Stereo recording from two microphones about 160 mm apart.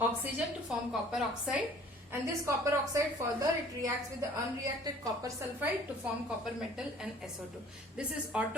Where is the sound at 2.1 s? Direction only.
20° right (ahead or behind).